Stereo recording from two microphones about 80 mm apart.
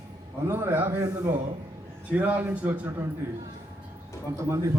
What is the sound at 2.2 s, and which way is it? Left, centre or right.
A man's voice, right.